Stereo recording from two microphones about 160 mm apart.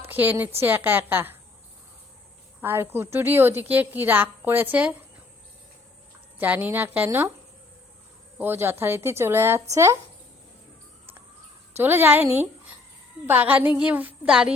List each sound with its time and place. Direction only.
0.1 s a woman's voice: 10° right (ahead or behind)
2.6 s a woman's voice: 15° right (ahead or behind)
6.4 s a woman's voice: 10° right (ahead or behind)
8.4 s a woman's voice: 15° right (ahead or behind)
11.8 s a woman's voice: 15° right (ahead or behind)